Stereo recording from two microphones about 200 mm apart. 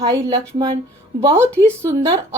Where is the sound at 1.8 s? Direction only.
15° right (ahead or behind).